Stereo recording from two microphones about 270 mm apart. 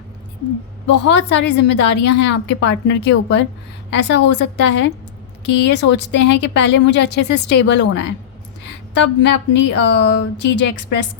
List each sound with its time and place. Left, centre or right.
0.9 s speech: left